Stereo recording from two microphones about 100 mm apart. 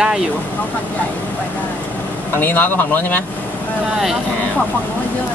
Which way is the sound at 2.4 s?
20° left (ahead or behind).